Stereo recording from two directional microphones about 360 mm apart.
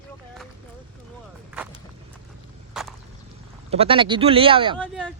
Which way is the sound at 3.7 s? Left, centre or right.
Centre.